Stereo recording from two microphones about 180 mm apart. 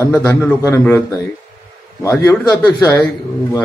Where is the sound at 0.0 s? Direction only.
15° left (ahead or behind).